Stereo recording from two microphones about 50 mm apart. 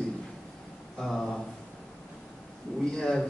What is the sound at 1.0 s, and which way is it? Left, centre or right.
Speech, centre.